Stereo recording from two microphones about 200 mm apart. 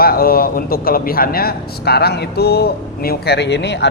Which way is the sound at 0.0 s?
50° left (ahead or behind).